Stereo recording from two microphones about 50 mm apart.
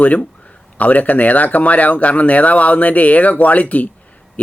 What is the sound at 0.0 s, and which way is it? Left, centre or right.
Speech, left.